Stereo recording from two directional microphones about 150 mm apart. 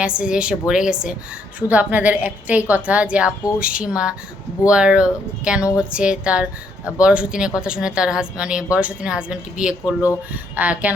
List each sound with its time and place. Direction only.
0.0 s a woman's voice: 5° right (ahead or behind)